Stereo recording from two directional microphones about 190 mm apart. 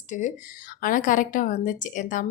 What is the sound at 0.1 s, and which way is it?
A woman's voice, 40° left (ahead or behind).